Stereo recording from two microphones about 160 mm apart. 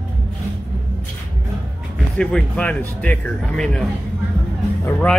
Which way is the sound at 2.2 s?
5° left (ahead or behind).